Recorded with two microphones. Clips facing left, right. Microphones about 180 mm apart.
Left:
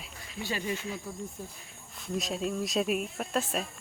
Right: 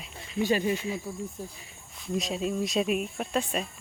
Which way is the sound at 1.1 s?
5° right (ahead or behind).